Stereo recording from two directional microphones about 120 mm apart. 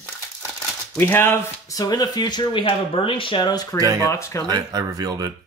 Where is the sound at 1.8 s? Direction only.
30° left (ahead or behind).